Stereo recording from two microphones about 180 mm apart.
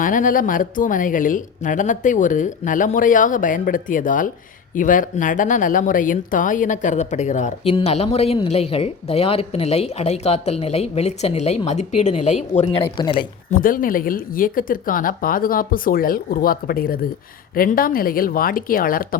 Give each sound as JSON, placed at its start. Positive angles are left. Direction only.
{"t": 0.0, "sound": "a woman's voice", "side_deg": 45}
{"t": 13.5, "sound": "speech", "side_deg": 50}